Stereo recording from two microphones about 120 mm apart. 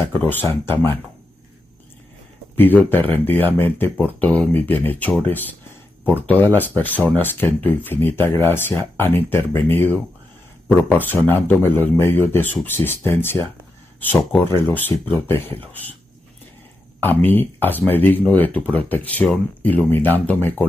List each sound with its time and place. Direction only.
0.1 s speech: 15° left (ahead or behind)
2.5 s speech: 15° left (ahead or behind)
14.7 s speech: 15° left (ahead or behind)
17.0 s speech: 15° left (ahead or behind)